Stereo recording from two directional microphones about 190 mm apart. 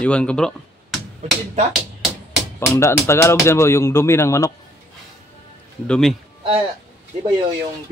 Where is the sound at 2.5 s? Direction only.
15° left (ahead or behind).